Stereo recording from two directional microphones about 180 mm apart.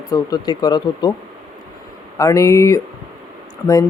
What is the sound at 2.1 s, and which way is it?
Speech, 20° left (ahead or behind).